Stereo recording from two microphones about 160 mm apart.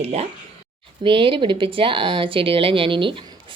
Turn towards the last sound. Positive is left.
turn(degrees=-30)  # may be behind; listen again after turning